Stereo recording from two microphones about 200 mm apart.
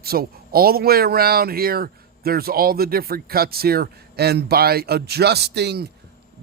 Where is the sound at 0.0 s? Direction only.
50° right (ahead or behind).